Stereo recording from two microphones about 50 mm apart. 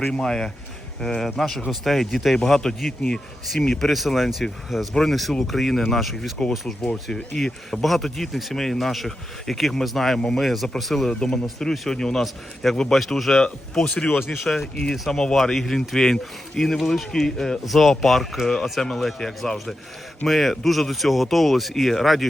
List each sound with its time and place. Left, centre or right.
0.2 s a man's voice: centre
11.1 s a man's voice: centre